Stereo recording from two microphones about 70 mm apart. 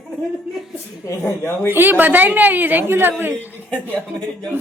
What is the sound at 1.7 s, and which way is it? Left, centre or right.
A woman's voice, right.